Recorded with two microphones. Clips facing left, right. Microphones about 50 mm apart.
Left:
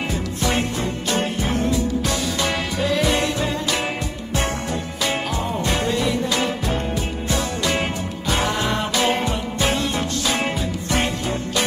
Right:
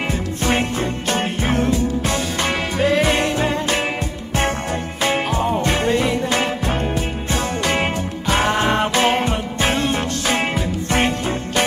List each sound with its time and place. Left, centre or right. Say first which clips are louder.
0.1 s music: right 3 dB; right
5.0 s music: right 5 dB; right